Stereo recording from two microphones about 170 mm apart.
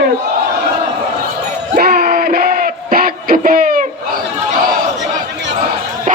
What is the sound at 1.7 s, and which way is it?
Music, 65° right (ahead or behind).